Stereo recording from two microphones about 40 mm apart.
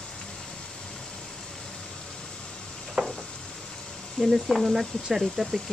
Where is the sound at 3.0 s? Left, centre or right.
Centre.